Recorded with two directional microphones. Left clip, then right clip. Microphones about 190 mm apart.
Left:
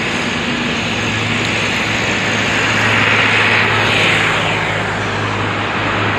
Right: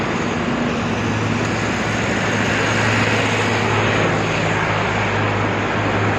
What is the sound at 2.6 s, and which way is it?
Vehicle, 25° right (ahead or behind).